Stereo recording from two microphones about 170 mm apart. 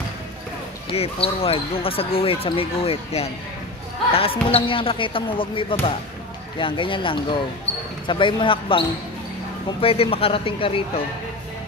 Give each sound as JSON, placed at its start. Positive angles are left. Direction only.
{"t": 0.8, "sound": "speech", "side_deg": 35}